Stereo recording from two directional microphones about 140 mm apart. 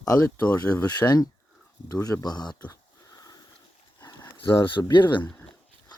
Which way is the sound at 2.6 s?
25° left (ahead or behind).